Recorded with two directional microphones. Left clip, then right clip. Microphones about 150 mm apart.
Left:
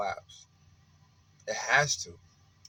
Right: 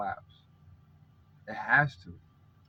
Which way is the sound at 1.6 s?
25° left (ahead or behind).